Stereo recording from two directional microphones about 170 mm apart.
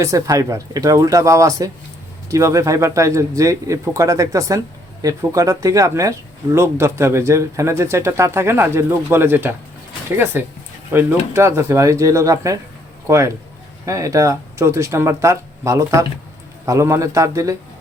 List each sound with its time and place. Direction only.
0.0 s speech: 20° right (ahead or behind)
10.9 s speech: 15° right (ahead or behind)